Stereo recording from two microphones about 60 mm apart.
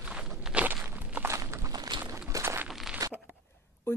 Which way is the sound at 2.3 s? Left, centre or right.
Right.